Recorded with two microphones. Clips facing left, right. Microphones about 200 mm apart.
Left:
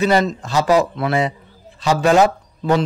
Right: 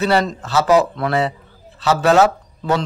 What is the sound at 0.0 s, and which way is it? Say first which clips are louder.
A man's voice: left 1 dB; 15° left (ahead or behind).